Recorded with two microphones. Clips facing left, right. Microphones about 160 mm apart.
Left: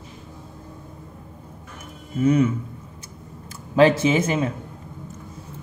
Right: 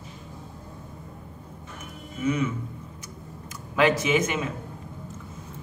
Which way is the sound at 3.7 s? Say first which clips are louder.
Left 5 dB; 30° left (ahead or behind).